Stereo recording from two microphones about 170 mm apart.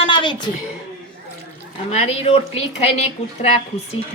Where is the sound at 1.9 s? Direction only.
40° left (ahead or behind).